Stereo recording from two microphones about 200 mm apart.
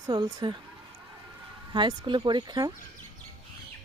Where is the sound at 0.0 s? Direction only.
20° right (ahead or behind).